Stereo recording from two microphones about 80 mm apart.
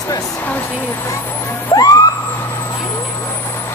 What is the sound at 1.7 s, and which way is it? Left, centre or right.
Vehicle, left.